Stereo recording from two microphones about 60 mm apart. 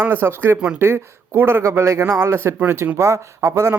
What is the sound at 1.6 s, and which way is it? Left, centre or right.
Speech, right.